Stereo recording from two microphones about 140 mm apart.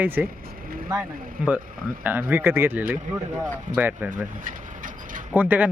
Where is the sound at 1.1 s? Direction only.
90° right.